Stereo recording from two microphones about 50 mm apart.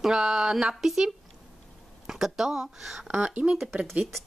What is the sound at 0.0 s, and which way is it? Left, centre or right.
Speech, centre.